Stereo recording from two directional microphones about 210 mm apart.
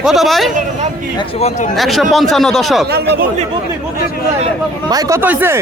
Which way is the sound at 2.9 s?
50° right (ahead or behind).